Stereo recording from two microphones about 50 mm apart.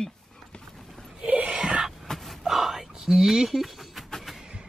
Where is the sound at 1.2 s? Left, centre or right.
Right.